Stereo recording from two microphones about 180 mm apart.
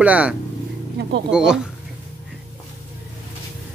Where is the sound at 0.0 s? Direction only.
5° right (ahead or behind).